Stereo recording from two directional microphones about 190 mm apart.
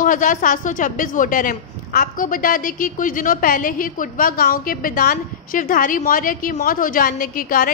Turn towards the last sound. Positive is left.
turn(degrees=45)  # may be behind; listen again after turning